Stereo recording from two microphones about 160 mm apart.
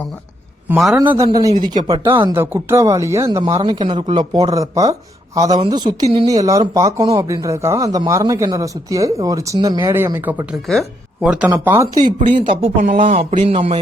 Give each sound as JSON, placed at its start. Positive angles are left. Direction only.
{"t": 0.9, "sound": "speech", "side_deg": -20}
{"t": 2.3, "sound": "speech", "side_deg": -15}
{"t": 9.9, "sound": "speech", "side_deg": -15}
{"t": 12.0, "sound": "speech", "side_deg": -35}
{"t": 13.1, "sound": "speech", "side_deg": -50}